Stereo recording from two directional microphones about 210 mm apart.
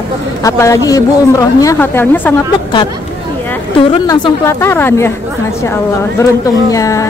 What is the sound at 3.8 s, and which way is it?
Speech, 25° left (ahead or behind).